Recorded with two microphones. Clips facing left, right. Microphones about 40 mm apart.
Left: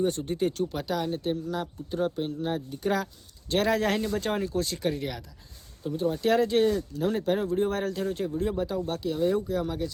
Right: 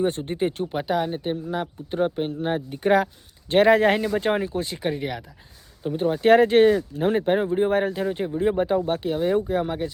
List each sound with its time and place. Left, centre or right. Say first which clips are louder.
0.0 s speech: right 3 dB; right
5.8 s speech: right 6 dB; right